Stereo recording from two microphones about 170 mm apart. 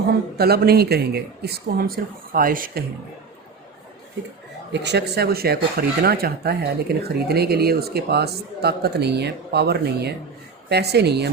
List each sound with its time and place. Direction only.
0.3 s speech: 65° right (ahead or behind)
4.7 s speech: 90° right; by 11.3 s 75° right (ahead or behind)